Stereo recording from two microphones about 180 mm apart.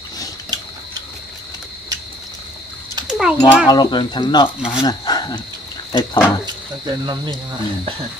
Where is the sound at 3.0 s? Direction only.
5° right (ahead or behind).